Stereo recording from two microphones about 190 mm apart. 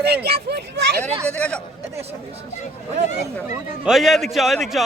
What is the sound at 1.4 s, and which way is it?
Speech, 5° left (ahead or behind).